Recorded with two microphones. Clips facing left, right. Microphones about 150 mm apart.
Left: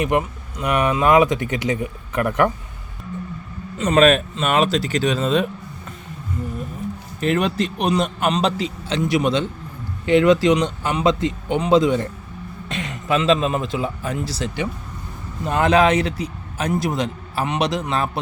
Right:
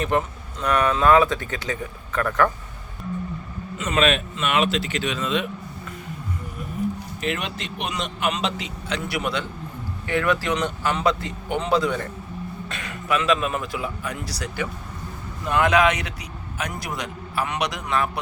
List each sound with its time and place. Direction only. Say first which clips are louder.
0.0 s speech: left 3 dB; 10° left (ahead or behind)
3.8 s a man's voice: left 7 dB; 35° left (ahead or behind)
7.2 s a man's voice: left 11 dB; 40° left (ahead or behind)